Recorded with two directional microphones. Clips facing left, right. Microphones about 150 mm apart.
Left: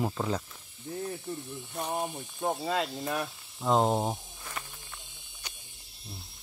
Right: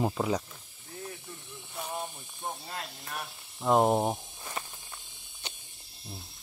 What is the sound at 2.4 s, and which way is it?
Speech, 80° left.